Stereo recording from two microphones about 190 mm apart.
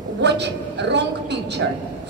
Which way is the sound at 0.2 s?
65° right (ahead or behind).